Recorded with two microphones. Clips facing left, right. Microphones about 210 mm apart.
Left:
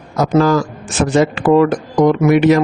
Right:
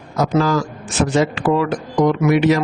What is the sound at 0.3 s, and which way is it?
A man's voice, 50° left (ahead or behind).